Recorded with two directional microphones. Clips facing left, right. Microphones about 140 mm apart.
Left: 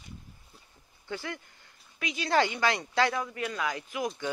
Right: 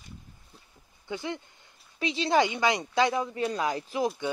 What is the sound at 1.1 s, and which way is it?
Speech, 20° right (ahead or behind).